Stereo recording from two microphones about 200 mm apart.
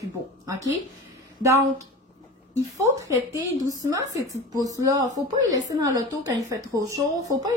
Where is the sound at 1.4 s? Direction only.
15° right (ahead or behind).